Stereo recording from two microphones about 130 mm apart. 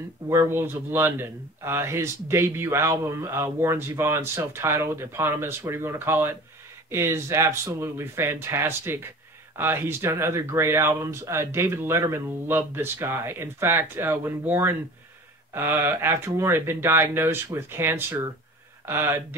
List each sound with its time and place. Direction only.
0.3 s speech: 20° right (ahead or behind)